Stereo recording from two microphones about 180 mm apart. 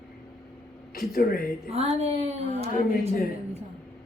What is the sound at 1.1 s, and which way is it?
Speech, 55° left (ahead or behind).